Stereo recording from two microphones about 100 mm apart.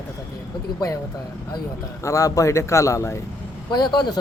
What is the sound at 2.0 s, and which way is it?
A man's voice, 35° left (ahead or behind).